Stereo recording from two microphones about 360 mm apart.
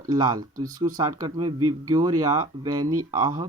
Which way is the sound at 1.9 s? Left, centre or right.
Centre.